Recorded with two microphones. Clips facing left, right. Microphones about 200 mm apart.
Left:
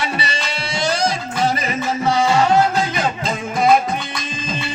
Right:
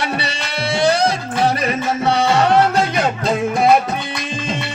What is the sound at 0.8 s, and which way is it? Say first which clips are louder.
Music: right 4 dB; 60° right (ahead or behind).